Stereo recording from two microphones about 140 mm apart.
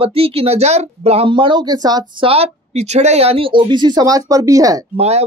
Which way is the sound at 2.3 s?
50° right (ahead or behind).